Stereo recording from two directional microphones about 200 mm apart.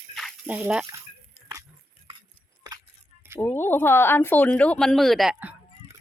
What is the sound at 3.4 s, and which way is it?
Speech, 10° left (ahead or behind).